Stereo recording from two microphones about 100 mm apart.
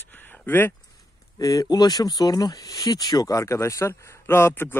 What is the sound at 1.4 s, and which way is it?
Speech, 35° left (ahead or behind).